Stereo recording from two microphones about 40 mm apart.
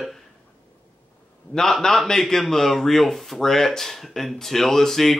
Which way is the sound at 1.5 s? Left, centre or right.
Left.